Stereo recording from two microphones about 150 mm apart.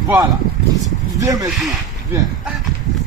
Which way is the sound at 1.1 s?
25° right (ahead or behind).